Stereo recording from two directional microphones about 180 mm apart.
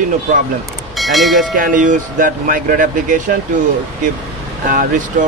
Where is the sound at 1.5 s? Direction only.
45° right (ahead or behind).